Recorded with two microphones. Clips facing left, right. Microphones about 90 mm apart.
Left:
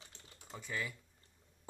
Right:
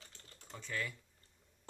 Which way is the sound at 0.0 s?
10° left (ahead or behind).